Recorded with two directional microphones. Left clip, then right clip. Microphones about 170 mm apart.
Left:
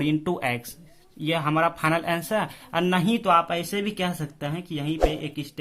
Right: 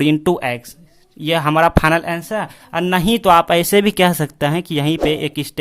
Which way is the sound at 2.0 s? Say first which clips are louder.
Right 4 dB; 25° right (ahead or behind).